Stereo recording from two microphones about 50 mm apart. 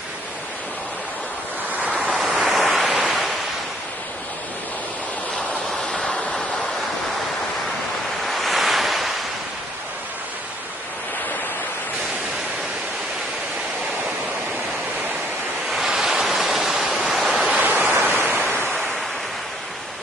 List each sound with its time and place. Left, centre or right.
1.7 s waves: right
2.4 s waves: centre
5.5 s waves: centre
8.2 s waves: centre
16.0 s a sound: centre
17.5 s a sound: right
18.1 s waves: right